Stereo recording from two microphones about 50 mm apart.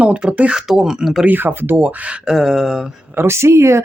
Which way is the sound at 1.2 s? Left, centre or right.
Right.